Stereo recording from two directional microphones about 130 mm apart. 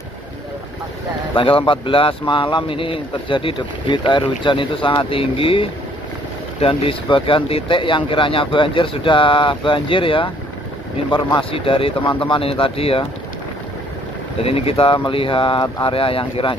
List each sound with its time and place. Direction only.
1.3 s speech: 40° left (ahead or behind)
11.3 s speech: 45° left (ahead or behind)
14.4 s speech: 50° left (ahead or behind)